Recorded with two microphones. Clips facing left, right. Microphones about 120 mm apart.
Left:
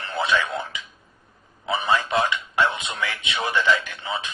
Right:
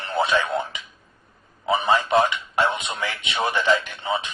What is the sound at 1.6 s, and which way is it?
Speech, 25° right (ahead or behind).